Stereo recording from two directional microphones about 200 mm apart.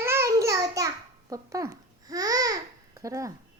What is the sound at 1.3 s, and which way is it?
Babbling, 15° right (ahead or behind).